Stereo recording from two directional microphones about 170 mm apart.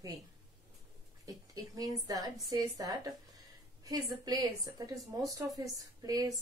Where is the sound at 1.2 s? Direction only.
20° right (ahead or behind).